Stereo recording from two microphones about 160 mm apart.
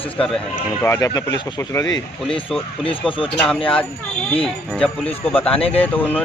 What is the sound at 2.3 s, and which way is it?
Speech, 30° left (ahead or behind).